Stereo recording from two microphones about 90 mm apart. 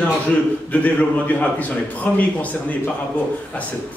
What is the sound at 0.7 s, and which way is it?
A man's voice, 15° left (ahead or behind).